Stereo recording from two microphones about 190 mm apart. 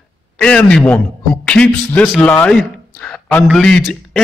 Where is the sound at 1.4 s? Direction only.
5° left (ahead or behind).